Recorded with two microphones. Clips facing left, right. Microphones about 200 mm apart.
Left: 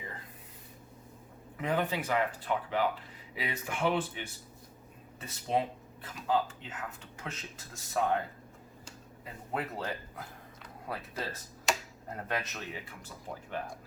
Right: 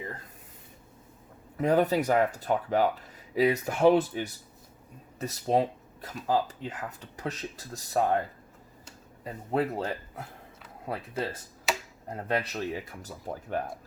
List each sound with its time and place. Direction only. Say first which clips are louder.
1.5 s speech: right 8 dB; 40° right (ahead or behind)
9.2 s speech: right 8 dB; 30° right (ahead or behind)
11.7 s tick-tock: right 1 dB; 5° right (ahead or behind)
12.1 s speech: right 6 dB; 30° right (ahead or behind)